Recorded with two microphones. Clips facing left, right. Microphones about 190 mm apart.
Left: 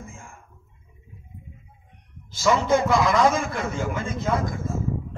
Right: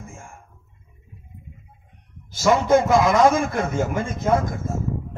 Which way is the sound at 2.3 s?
45° right (ahead or behind).